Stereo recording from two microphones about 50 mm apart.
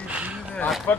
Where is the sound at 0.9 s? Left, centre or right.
Left.